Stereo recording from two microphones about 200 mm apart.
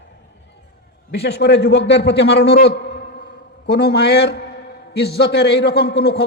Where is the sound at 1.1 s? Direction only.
55° left (ahead or behind).